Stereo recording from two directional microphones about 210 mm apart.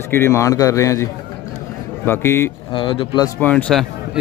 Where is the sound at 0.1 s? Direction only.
10° left (ahead or behind).